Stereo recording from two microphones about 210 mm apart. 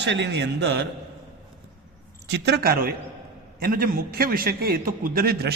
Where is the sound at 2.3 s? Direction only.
55° right (ahead or behind).